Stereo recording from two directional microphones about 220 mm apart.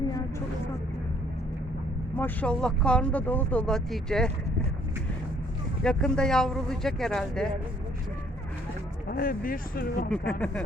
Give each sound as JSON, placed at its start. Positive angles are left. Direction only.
{"t": 2.1, "sound": "speech", "side_deg": 5}
{"t": 5.8, "sound": "speech", "side_deg": 5}
{"t": 9.0, "sound": "speech", "side_deg": 40}
{"t": 10.1, "sound": "speech", "side_deg": 5}